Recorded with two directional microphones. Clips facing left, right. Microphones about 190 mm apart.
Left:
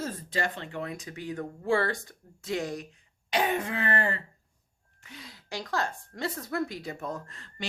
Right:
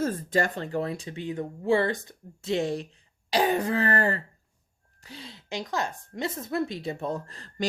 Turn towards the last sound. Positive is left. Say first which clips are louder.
# right 5 dB
turn(degrees=-35)  # may be behind; listen again after turning